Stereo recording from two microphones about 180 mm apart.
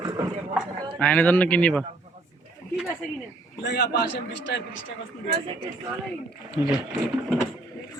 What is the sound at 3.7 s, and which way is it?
A man's voice, 70° left (ahead or behind).